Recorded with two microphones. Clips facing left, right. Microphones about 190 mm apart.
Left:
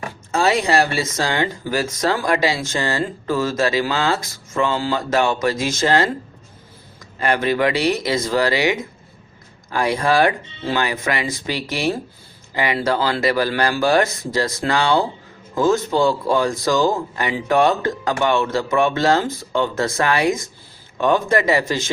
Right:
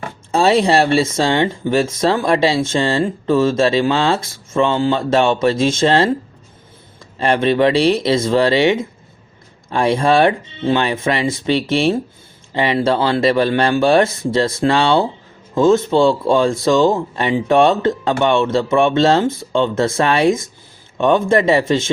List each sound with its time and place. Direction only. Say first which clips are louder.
0.3 s speech: right 5 dB; 30° right (ahead or behind)
7.2 s speech: right 4 dB; 30° right (ahead or behind)